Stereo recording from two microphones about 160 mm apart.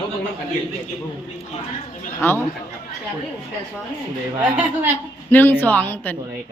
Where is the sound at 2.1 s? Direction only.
15° left (ahead or behind).